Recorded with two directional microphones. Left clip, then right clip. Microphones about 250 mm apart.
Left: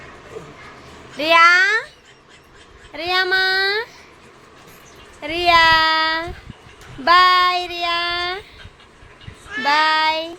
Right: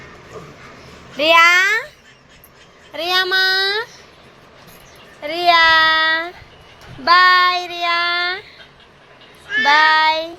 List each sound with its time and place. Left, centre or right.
1.1 s a child's voice: centre
2.9 s child singing: centre
5.2 s a child's voice: centre
7.0 s child singing: centre
9.6 s child singing: centre